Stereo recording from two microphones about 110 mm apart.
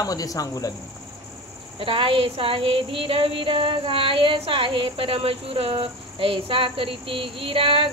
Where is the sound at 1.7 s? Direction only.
55° right (ahead or behind).